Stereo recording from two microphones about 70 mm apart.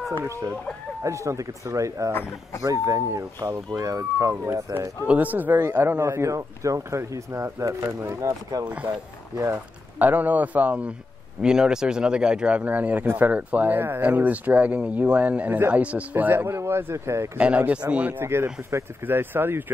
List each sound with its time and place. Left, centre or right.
1.0 s speech: right
5.0 s speech: right
5.6 s speech: right
9.9 s speech: right
11.4 s speech: centre; by 16.5 s right
16.5 s speech: right
17.4 s speech: right
18.2 s speech: right